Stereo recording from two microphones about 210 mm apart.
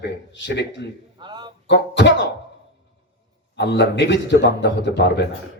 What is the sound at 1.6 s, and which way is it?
Speech, 55° left (ahead or behind).